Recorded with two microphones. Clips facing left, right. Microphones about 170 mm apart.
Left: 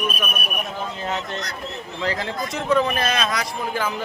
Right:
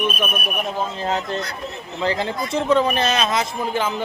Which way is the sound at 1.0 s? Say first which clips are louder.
Right 4 dB; 30° right (ahead or behind).